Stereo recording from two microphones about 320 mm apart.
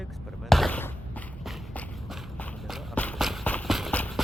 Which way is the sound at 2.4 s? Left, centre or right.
Centre.